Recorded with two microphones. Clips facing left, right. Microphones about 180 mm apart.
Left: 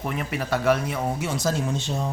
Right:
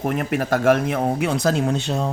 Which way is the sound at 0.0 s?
50° right (ahead or behind).